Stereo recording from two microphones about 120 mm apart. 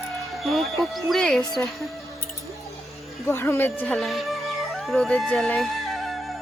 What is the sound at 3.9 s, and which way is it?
A woman's voice, centre (ahead or behind).